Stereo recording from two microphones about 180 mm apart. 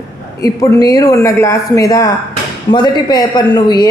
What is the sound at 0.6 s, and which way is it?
A woman's voice, 20° left (ahead or behind).